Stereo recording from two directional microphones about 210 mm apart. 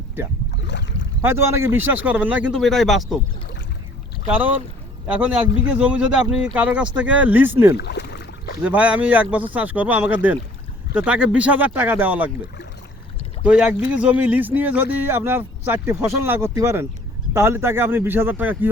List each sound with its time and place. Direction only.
0.5 s boat: 55° left (ahead or behind)
1.2 s speech: 10° right (ahead or behind)
4.3 s speech: 5° right (ahead or behind)
7.8 s boat: 55° left (ahead or behind)
8.6 s speech: 5° right (ahead or behind)
13.4 s speech: 5° right (ahead or behind)